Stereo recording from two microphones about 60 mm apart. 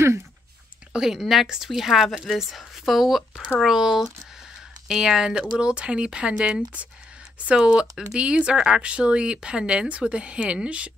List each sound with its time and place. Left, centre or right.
0.9 s a woman's voice: centre